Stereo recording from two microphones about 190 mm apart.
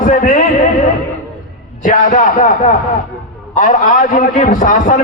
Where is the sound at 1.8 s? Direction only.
45° left (ahead or behind).